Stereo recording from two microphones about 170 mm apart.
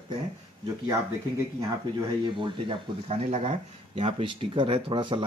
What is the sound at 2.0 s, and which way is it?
Speech, 30° right (ahead or behind).